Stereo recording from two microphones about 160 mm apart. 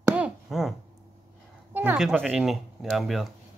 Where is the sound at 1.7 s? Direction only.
10° right (ahead or behind).